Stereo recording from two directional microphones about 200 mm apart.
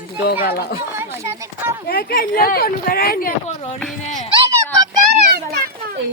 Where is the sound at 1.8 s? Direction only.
50° left (ahead or behind).